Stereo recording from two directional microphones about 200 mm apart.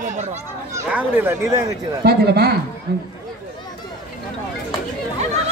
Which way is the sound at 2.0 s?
55° right (ahead or behind).